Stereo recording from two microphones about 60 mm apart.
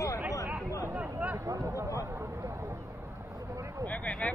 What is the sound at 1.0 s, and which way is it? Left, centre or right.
Speech, right.